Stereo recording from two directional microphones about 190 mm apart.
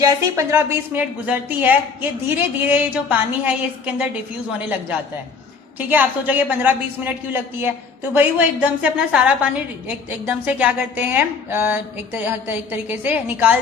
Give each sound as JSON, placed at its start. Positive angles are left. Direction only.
{"t": 0.0, "sound": "a woman's voice", "side_deg": -15}
{"t": 5.9, "sound": "a woman's voice", "side_deg": -10}